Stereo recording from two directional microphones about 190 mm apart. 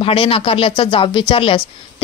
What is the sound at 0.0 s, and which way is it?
A woman's voice, 30° left (ahead or behind).